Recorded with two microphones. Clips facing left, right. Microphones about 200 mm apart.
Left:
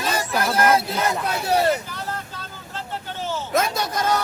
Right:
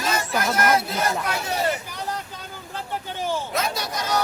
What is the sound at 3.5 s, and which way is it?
Hubbub, 50° left (ahead or behind).